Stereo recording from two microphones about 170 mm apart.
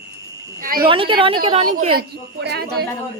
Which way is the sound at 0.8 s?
30° right (ahead or behind).